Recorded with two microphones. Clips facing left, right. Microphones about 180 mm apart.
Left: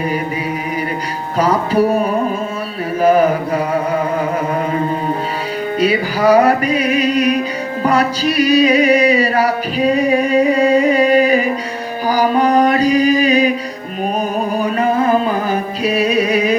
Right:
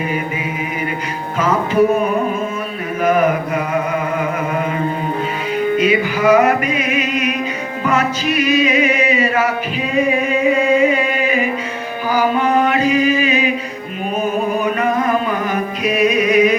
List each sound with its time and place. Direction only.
1.4 s music: 35° left (ahead or behind)
3.0 s mantra: 30° left (ahead or behind)
5.7 s music: 35° left (ahead or behind)